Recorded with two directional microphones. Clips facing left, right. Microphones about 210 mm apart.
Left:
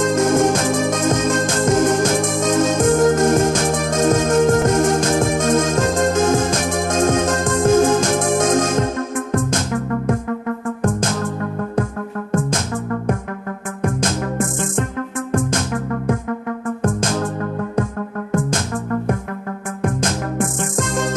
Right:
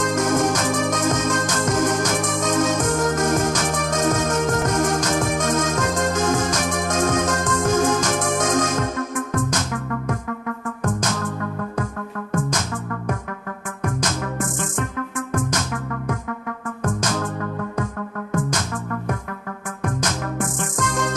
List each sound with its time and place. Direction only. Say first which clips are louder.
0.0 s music: left 5 dB; 30° left (ahead or behind)
15.3 s music: left 5 dB; 30° left (ahead or behind)
19.8 s music: left 4 dB; 30° left (ahead or behind)